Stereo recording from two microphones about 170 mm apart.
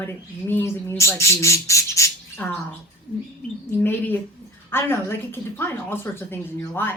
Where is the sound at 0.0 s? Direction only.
10° left (ahead or behind).